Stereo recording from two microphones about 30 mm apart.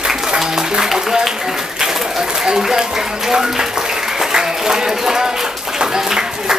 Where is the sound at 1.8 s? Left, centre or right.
Centre.